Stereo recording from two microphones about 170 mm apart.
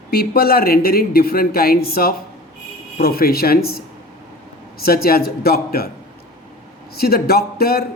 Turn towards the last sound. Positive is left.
turn(degrees=65)  # may be behind; listen again after turning